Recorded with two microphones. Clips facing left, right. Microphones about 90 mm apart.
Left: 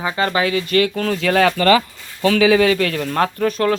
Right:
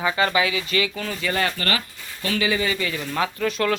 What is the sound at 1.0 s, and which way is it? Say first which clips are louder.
Speech: left 8 dB; 65° left (ahead or behind).